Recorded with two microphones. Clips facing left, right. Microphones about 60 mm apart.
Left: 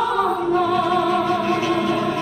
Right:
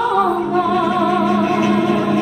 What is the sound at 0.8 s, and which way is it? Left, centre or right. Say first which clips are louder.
Music: right 3 dB; centre.